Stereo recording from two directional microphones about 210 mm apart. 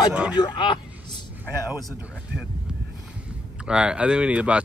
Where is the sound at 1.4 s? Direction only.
5° right (ahead or behind).